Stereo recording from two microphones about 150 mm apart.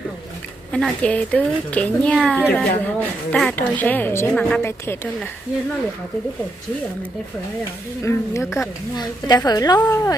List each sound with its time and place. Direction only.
0.7 s a woman's voice: 5° left (ahead or behind)
8.0 s a woman's voice: 20° left (ahead or behind)